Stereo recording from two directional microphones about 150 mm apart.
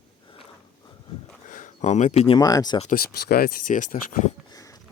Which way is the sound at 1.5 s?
55° left (ahead or behind).